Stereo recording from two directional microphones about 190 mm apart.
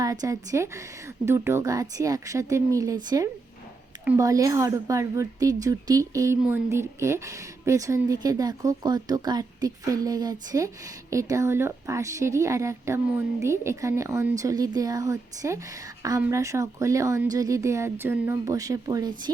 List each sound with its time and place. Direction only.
0.0 s speech: 15° right (ahead or behind)